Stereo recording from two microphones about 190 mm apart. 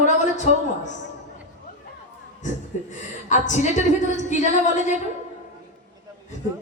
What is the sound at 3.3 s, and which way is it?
A woman's voice, 40° left (ahead or behind).